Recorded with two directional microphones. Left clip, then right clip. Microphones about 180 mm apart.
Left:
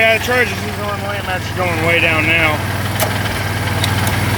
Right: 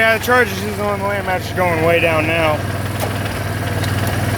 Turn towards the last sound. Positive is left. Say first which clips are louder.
# left 2 dB
turn(degrees=-15)  # may be behind; listen again after turning